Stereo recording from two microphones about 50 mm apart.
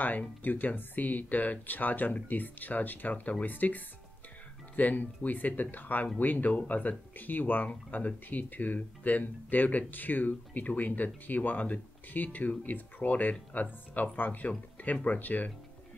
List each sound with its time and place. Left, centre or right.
0.0 s speech: left